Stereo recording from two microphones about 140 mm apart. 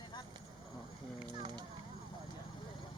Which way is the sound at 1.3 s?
35° right (ahead or behind).